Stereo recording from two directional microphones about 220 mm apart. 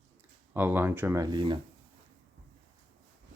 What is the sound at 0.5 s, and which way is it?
Speech, 10° right (ahead or behind).